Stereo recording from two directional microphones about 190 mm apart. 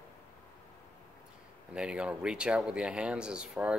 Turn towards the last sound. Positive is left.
turn(degrees=-5)  # may be behind; listen again after turning